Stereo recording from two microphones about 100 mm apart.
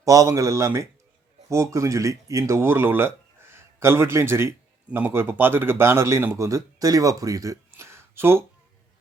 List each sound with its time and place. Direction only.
0.0 s a man's voice: 35° right (ahead or behind)